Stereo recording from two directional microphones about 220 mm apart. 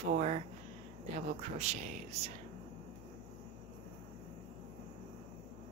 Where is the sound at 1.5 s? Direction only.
30° right (ahead or behind).